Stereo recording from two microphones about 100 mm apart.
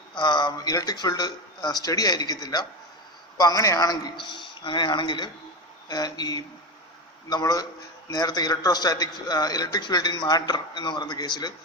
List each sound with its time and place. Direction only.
0.2 s a man's voice: 50° left (ahead or behind)